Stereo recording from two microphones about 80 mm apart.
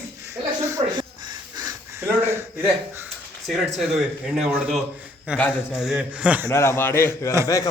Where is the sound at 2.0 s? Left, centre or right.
Right.